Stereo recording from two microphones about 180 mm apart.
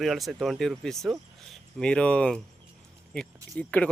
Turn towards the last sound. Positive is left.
turn(degrees=5)  # may be behind; listen again after turning